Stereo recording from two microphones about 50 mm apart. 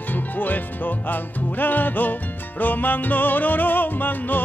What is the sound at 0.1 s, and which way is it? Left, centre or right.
Music, left.